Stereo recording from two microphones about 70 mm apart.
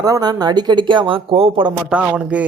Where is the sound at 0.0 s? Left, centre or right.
Right.